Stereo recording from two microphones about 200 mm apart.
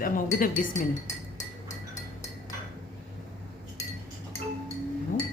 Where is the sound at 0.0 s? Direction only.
45° left (ahead or behind).